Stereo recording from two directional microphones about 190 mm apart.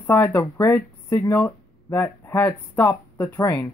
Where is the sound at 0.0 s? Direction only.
10° left (ahead or behind).